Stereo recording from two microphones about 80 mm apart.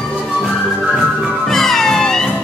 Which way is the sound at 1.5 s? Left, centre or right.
Centre.